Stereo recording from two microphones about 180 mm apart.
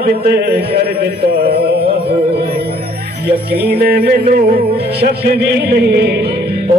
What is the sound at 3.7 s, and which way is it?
Music, 60° right (ahead or behind).